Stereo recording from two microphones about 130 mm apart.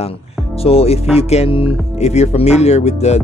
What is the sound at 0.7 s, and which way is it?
Speech, 50° left (ahead or behind).